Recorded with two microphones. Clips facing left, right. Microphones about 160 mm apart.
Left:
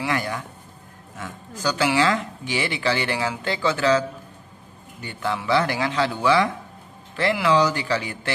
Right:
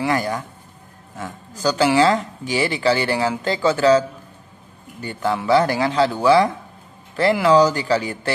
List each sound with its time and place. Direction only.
0.0 s speech: 40° right (ahead or behind)
5.0 s speech: 40° right (ahead or behind)